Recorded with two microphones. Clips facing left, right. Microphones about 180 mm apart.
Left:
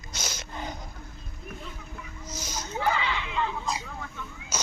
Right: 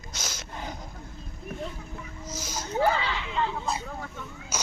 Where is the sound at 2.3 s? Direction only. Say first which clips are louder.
Right 1 dB; 5° right (ahead or behind).